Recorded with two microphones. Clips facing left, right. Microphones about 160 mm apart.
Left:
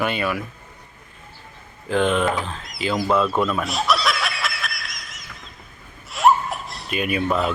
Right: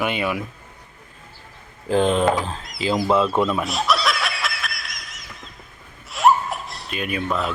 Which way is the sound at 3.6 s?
Centre (ahead or behind).